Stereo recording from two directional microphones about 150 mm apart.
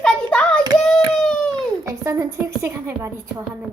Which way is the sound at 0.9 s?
Centre (ahead or behind).